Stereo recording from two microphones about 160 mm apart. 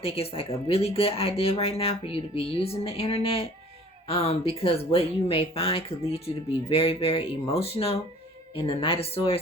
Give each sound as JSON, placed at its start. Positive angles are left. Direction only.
{"t": 0.0, "sound": "speech", "side_deg": 40}